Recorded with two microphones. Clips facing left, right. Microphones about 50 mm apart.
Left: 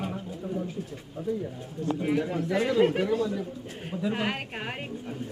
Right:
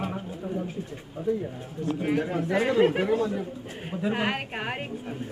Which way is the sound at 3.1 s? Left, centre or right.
Right.